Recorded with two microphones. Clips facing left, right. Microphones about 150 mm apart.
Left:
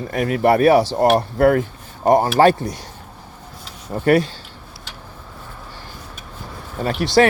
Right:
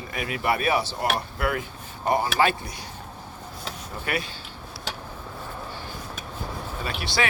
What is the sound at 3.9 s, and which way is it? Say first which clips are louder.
Speech: left 15 dB; 45° left (ahead or behind).